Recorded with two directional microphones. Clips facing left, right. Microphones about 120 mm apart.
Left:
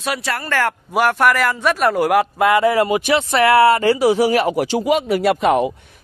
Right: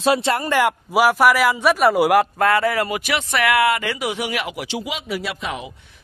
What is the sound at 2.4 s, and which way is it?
A man's voice, 20° left (ahead or behind).